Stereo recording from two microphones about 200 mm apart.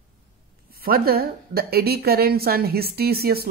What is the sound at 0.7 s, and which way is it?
A woman's voice, 50° right (ahead or behind).